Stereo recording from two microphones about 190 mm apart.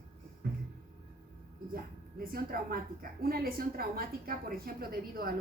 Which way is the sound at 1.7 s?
50° right (ahead or behind).